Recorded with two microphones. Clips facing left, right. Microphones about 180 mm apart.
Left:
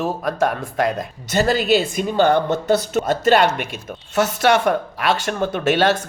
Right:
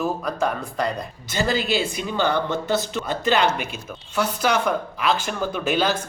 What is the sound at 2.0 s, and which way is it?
Speech, 45° left (ahead or behind).